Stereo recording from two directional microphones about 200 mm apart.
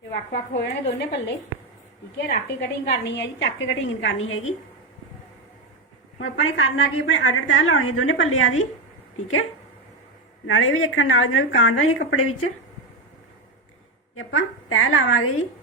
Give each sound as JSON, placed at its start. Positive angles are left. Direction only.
{"t": 0.1, "sound": "a woman's voice", "side_deg": 55}
{"t": 2.2, "sound": "a woman's voice", "side_deg": 50}
{"t": 6.1, "sound": "a woman's voice", "side_deg": 80}
{"t": 14.2, "sound": "a woman's voice", "side_deg": 90}